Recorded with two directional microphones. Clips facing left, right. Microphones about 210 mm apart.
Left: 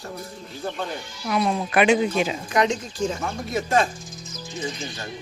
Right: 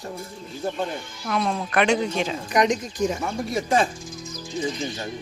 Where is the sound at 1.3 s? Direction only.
5° left (ahead or behind).